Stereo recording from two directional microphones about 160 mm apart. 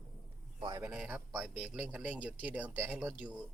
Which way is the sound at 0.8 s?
5° right (ahead or behind).